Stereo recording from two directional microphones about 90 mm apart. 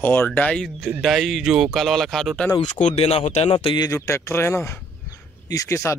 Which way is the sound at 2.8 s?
85° left.